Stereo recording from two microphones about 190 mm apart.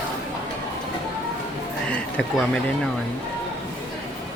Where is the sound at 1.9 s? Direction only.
5° left (ahead or behind).